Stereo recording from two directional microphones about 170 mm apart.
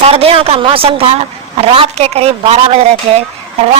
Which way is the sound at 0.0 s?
35° right (ahead or behind).